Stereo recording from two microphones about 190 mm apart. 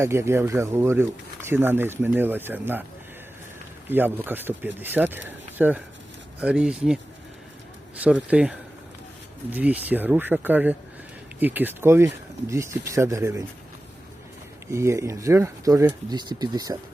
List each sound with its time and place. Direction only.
0.0 s speech: 15° right (ahead or behind)
3.8 s speech: 10° right (ahead or behind)
8.0 s speech: 5° right (ahead or behind)
14.7 s speech: 15° right (ahead or behind)